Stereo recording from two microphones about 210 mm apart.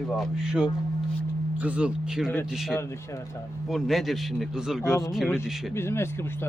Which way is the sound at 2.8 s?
10° left (ahead or behind).